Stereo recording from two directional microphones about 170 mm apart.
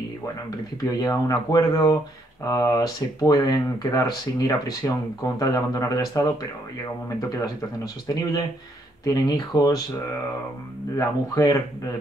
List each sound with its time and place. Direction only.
0.7 s speech: 20° left (ahead or behind)
11.0 s speech: 20° left (ahead or behind)